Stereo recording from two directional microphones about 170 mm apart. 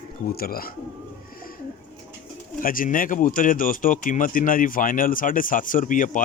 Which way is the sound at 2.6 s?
55° left (ahead or behind).